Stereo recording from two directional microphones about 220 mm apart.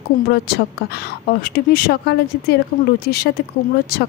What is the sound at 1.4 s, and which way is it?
A woman's voice, 45° left (ahead or behind).